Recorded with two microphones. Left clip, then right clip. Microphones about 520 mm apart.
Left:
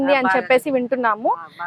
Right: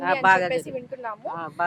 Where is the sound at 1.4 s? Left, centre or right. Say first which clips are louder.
Right 4 dB; right.